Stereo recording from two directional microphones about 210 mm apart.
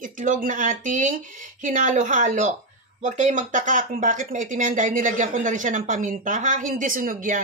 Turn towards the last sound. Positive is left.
turn(degrees=-40)  # may be behind; listen again after turning